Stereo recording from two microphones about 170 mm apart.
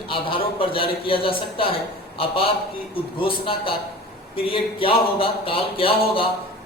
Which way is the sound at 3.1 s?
30° left (ahead or behind).